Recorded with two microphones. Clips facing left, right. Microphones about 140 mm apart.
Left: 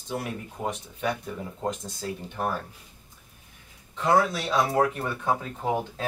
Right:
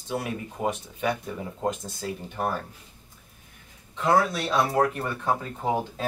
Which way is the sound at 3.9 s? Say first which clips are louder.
Even; centre (ahead or behind).